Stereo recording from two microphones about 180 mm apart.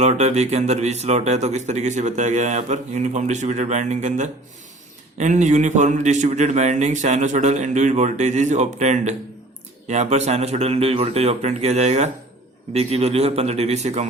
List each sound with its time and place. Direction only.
0.0 s speech: 40° right (ahead or behind)